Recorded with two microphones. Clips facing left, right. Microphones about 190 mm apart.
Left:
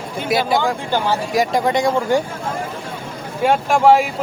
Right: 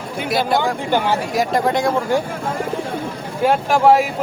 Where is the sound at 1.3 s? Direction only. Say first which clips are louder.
Left 2 dB; centre (ahead or behind).